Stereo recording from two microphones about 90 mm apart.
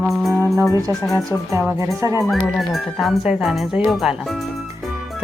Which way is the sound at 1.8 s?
35° right (ahead or behind).